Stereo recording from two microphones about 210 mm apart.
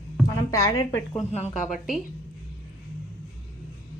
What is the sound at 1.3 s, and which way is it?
Speech, 30° left (ahead or behind).